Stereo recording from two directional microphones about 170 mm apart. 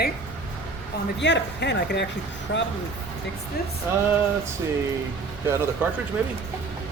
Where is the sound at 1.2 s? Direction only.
90° left.